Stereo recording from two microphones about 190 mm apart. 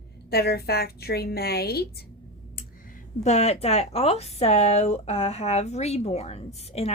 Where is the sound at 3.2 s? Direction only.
35° left (ahead or behind).